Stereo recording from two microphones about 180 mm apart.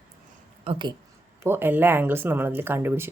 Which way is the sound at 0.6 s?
30° right (ahead or behind).